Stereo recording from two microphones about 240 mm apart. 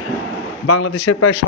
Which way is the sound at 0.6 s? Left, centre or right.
Left.